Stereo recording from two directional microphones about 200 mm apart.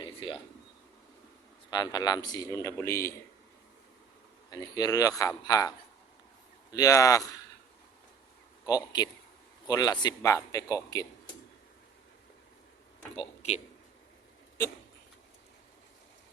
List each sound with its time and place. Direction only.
0.0 s a sound: 25° left (ahead or behind)
1.7 s speech: 20° left (ahead or behind)
4.5 s a man's voice: 20° left (ahead or behind)
8.6 s a man's voice: 20° left (ahead or behind)
13.1 s speech: 30° left (ahead or behind)